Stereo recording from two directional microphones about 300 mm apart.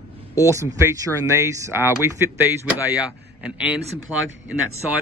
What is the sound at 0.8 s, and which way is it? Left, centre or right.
Speech, centre.